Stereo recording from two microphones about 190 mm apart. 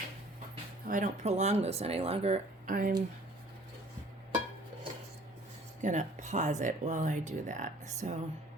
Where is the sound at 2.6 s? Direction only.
45° right (ahead or behind).